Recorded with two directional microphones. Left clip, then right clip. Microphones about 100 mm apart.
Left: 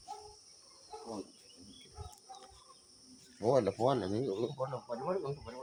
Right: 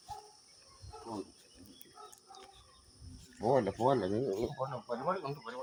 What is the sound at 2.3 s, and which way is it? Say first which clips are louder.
Chicken: left 1 dB; 10° left (ahead or behind).